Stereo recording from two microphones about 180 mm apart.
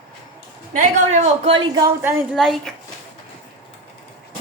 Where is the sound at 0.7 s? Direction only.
35° right (ahead or behind).